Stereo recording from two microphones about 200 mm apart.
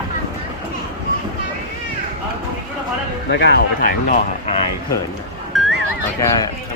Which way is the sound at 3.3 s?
55° left (ahead or behind).